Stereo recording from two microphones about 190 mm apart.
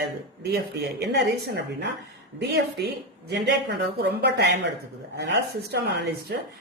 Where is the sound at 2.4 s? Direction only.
60° right (ahead or behind).